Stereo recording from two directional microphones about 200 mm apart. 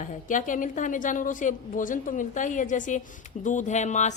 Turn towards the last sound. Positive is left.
turn(degrees=35)  # may be behind; listen again after turning